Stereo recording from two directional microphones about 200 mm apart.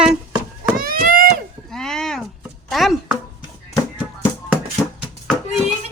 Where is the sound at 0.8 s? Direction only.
45° right (ahead or behind).